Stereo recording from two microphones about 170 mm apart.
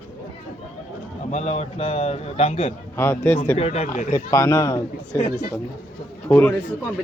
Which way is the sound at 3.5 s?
40° left (ahead or behind).